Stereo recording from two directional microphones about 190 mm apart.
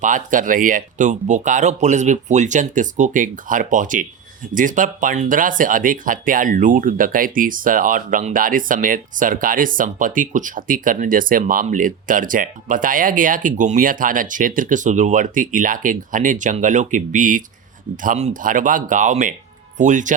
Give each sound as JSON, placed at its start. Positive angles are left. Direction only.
{"t": 0.0, "sound": "speech", "side_deg": -45}